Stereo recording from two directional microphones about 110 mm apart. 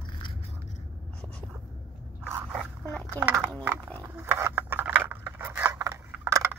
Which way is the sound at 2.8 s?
10° left (ahead or behind).